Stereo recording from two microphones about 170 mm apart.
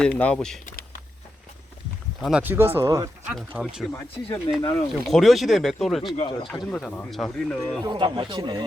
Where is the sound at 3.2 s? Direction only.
5° right (ahead or behind).